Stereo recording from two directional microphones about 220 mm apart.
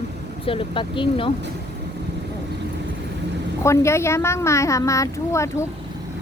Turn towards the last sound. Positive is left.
turn(degrees=15)  # may be behind; listen again after turning